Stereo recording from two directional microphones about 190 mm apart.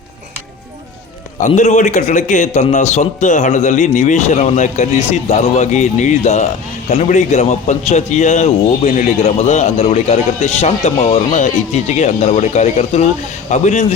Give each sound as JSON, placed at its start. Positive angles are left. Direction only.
{"t": 1.4, "sound": "a man's voice", "side_deg": 40}